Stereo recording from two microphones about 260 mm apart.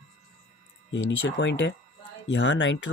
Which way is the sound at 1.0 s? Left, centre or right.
Left.